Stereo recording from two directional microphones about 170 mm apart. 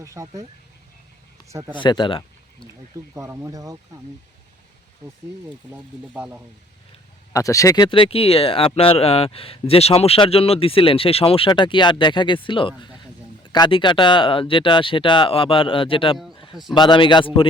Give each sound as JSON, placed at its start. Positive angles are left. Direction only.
{"t": 0.0, "sound": "speech", "side_deg": -20}
{"t": 1.7, "sound": "speech", "side_deg": 25}
{"t": 3.2, "sound": "speech", "side_deg": -15}
{"t": 5.7, "sound": "speech", "side_deg": -10}
{"t": 7.3, "sound": "a man's voice", "side_deg": 20}
{"t": 7.9, "sound": "a man's voice", "side_deg": 30}